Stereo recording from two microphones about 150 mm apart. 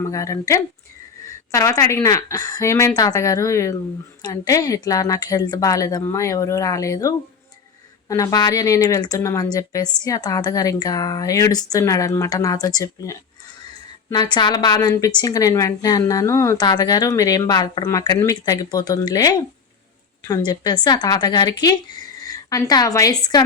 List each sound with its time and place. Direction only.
0.1 s a woman's voice: 20° left (ahead or behind)